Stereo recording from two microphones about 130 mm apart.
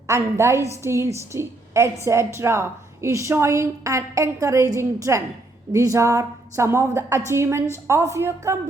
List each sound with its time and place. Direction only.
0.1 s a woman's voice: 20° right (ahead or behind)